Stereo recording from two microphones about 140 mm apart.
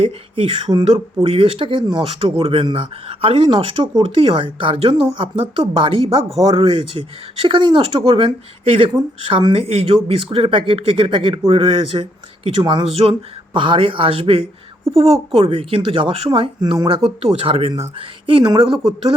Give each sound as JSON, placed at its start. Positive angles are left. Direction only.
{"t": 0.0, "sound": "speech", "side_deg": -40}